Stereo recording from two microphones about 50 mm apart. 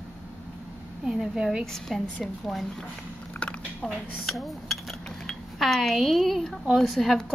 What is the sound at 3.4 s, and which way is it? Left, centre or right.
Chewing, left.